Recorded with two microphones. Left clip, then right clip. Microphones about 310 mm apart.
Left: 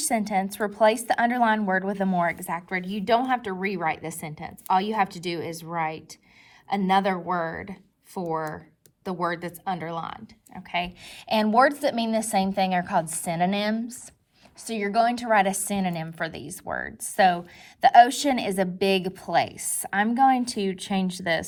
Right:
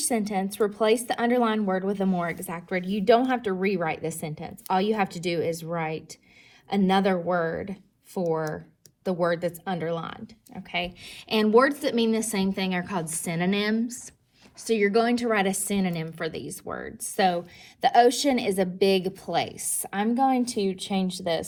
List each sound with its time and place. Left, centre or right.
0.0 s a woman's voice: left